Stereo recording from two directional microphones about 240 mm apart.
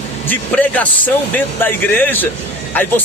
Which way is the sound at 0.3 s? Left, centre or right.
Centre.